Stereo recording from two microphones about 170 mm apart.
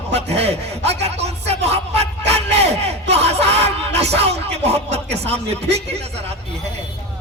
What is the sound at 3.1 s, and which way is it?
Speech, 40° right (ahead or behind).